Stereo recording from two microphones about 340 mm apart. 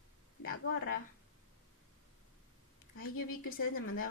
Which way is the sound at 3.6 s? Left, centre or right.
Left.